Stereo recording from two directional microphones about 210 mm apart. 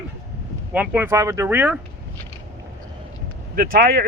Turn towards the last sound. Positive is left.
turn(degrees=-45)  # may be behind; listen again after turning